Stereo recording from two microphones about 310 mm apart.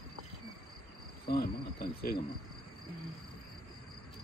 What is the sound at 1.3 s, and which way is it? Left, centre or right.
Cricket, left.